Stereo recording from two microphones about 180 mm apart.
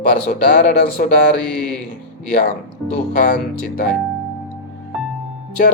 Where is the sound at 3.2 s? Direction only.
55° left (ahead or behind).